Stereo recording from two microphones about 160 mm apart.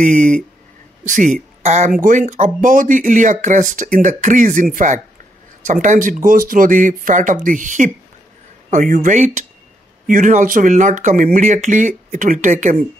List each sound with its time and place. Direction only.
0.0 s speech: 50° right (ahead or behind)